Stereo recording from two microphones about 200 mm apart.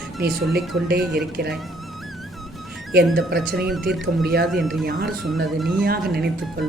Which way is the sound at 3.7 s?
Centre (ahead or behind).